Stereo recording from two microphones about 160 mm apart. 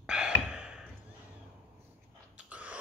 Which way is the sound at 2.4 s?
10° right (ahead or behind).